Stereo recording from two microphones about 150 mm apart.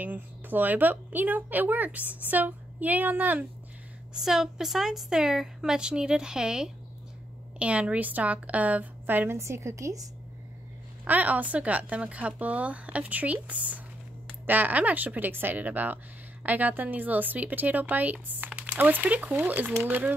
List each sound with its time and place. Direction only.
0.0 s a woman's voice: 10° right (ahead or behind)
11.1 s speech: 10° right (ahead or behind)